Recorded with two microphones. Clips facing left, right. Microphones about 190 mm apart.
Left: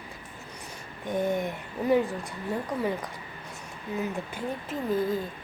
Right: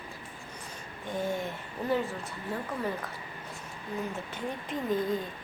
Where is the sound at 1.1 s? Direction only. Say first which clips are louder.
Left 5 dB; 20° left (ahead or behind).